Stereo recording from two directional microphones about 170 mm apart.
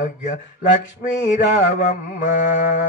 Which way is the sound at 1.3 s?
50° left (ahead or behind).